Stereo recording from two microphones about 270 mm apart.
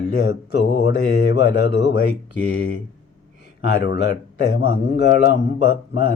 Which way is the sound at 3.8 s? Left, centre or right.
Left.